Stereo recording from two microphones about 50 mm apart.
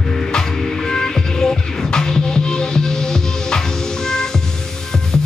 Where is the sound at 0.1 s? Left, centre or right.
Centre.